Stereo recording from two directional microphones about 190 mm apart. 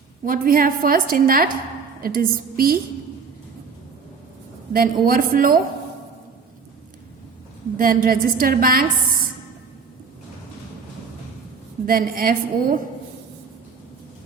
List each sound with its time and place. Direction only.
0.3 s a woman's voice: 50° right (ahead or behind)
4.7 s a woman's voice: 50° right (ahead or behind)
7.8 s a woman's voice: 45° right (ahead or behind)
11.9 s a woman's voice: 50° right (ahead or behind)